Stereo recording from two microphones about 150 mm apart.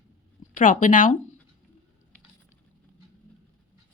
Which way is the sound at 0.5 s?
60° left (ahead or behind).